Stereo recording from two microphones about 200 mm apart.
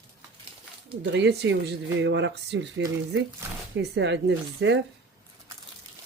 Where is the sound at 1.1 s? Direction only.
60° right (ahead or behind).